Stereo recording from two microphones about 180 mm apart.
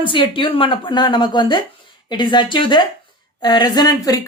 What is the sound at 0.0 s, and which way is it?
A woman's voice, 25° left (ahead or behind).